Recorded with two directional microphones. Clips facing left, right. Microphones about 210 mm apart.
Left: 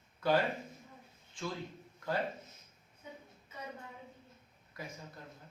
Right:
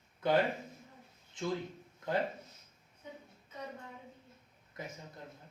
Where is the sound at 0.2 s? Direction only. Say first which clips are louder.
Right 1 dB; 20° right (ahead or behind).